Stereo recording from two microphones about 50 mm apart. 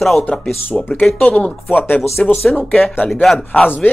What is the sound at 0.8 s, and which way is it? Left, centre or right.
Mantra, centre.